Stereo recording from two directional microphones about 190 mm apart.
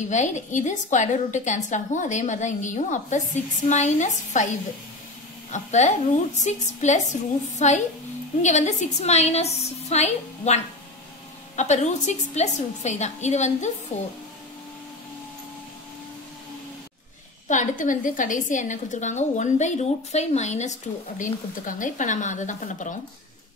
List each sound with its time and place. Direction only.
0.1 s a woman's voice: 40° left (ahead or behind)
5.5 s a woman's voice: 40° left (ahead or behind)
17.5 s a woman's voice: 40° left (ahead or behind)